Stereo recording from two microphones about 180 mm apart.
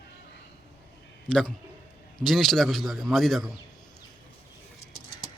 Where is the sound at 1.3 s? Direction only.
5° left (ahead or behind).